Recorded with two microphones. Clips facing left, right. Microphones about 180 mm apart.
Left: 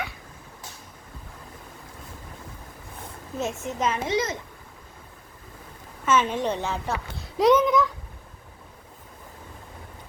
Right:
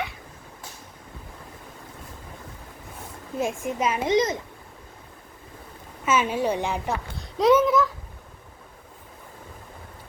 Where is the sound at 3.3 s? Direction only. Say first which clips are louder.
Right 3 dB; 10° right (ahead or behind).